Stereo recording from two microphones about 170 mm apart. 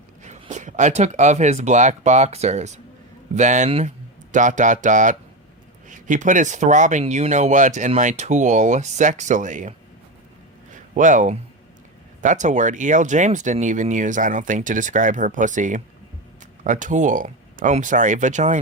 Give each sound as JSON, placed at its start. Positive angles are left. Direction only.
{"t": 0.2, "sound": "speech", "side_deg": -45}
{"t": 10.7, "sound": "a sound", "side_deg": -50}
{"t": 12.2, "sound": "speech", "side_deg": -45}